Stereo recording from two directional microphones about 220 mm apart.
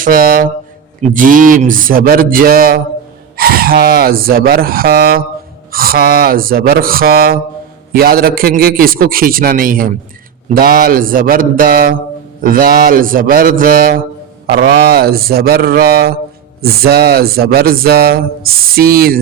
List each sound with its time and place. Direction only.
0.0 s a man's voice: 40° right (ahead or behind)